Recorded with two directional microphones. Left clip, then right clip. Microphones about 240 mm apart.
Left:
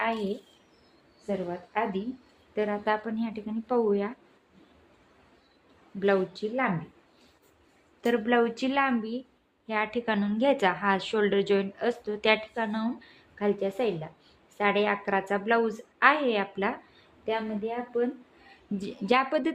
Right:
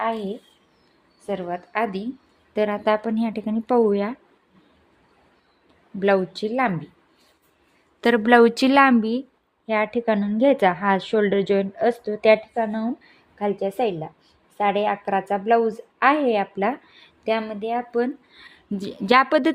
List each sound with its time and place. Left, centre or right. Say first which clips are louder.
1.3 s a woman's voice: right 5 dB; right
6.0 s a woman's voice: right 6 dB; right
8.0 s a woman's voice: right 10 dB; right
18.5 s a woman's voice: right 5 dB; right